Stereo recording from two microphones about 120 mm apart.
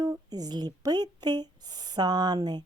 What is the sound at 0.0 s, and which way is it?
Speech, 30° right (ahead or behind).